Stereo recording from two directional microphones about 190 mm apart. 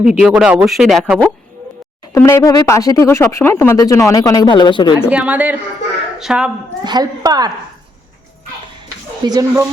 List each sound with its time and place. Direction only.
0.0 s speech: centre (ahead or behind)
2.1 s speech: 15° left (ahead or behind)
5.0 s speech: 5° right (ahead or behind)
6.8 s a woman's voice: 20° right (ahead or behind)
9.2 s a woman's voice: 20° right (ahead or behind)